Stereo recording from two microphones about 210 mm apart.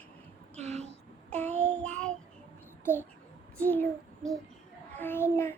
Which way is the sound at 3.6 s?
10° left (ahead or behind).